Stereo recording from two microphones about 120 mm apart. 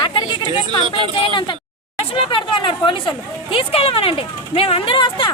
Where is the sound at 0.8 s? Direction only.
40° right (ahead or behind).